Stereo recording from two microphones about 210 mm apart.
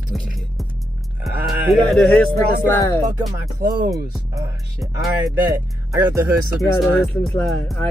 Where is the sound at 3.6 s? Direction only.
45° right (ahead or behind).